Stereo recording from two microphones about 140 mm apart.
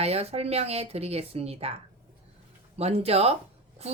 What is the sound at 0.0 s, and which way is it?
A woman's voice, 45° right (ahead or behind).